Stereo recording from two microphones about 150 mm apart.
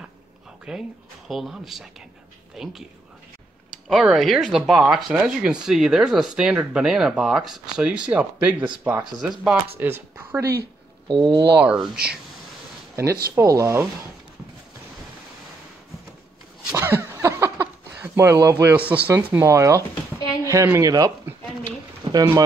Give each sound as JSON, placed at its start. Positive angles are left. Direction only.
{"t": 0.7, "sound": "speech", "side_deg": -5}
{"t": 3.9, "sound": "speech", "side_deg": 0}
{"t": 10.4, "sound": "speech", "side_deg": -90}
{"t": 11.1, "sound": "speech", "side_deg": -30}
{"t": 11.6, "sound": "speech", "side_deg": -5}
{"t": 12.9, "sound": "speech", "side_deg": -20}
{"t": 16.7, "sound": "a sound", "side_deg": -15}
{"t": 19.3, "sound": "speech", "side_deg": -20}
{"t": 22.1, "sound": "speech", "side_deg": -25}